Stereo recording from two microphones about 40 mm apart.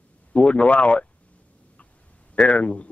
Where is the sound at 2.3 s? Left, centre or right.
Left.